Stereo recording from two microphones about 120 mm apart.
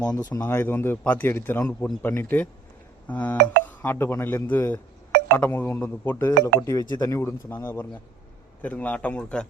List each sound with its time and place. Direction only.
0.1 s speech: 35° left (ahead or behind)
0.4 s speech: 20° left (ahead or behind)